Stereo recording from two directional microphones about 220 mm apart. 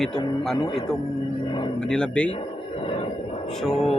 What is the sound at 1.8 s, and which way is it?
Speech, 5° left (ahead or behind).